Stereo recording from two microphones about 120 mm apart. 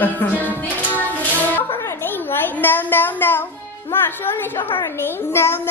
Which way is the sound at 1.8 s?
20° left (ahead or behind).